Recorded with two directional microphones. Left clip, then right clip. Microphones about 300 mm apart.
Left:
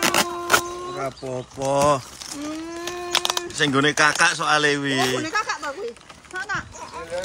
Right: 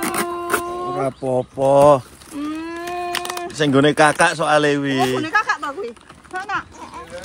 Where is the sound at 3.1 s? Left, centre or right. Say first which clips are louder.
Left 7 dB; centre.